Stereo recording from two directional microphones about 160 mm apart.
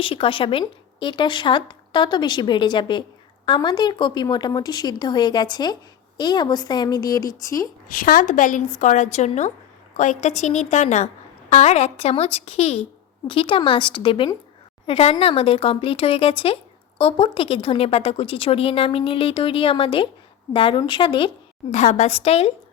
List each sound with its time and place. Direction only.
0.0 s speech: 35° left (ahead or behind)
7.9 s a woman's voice: 60° left (ahead or behind); by 21.2 s 30° left (ahead or behind)
21.7 s a woman's voice: 45° left (ahead or behind)